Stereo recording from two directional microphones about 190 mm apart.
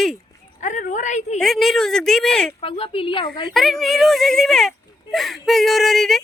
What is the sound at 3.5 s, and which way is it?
Speech, centre (ahead or behind).